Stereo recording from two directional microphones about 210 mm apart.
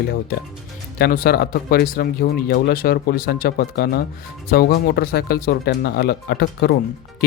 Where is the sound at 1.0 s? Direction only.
45° left (ahead or behind).